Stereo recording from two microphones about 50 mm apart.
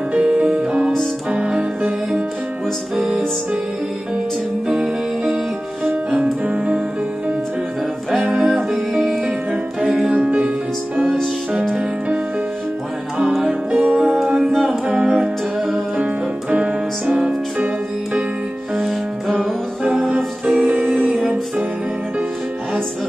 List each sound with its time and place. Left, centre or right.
0.1 s music: right
4.6 s music: centre
6.4 s music: right
8.3 s music: centre
10.0 s music: right
13.3 s music: centre
13.7 s music: right
14.0 s music: centre
18.8 s music: centre
19.3 s music: right
20.9 s music: centre